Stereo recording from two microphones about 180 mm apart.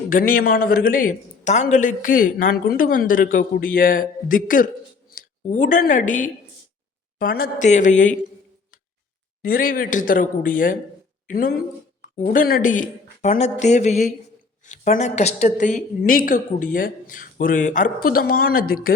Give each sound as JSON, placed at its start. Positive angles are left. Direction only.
{"t": 0.1, "sound": "a man's voice", "side_deg": 50}
{"t": 7.7, "sound": "a man's voice", "side_deg": 40}
{"t": 9.4, "sound": "a man's voice", "side_deg": 50}